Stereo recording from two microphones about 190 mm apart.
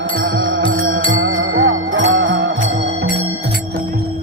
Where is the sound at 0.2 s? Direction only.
75° right (ahead or behind).